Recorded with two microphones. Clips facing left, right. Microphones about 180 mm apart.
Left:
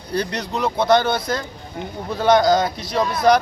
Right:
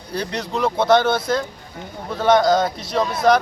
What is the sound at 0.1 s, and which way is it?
Speech, centre (ahead or behind).